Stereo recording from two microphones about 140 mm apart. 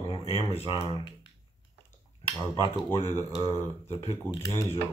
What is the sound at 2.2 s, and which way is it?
Cutlery, 45° left (ahead or behind).